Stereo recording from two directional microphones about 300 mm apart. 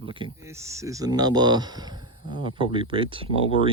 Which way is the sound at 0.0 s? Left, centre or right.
Centre.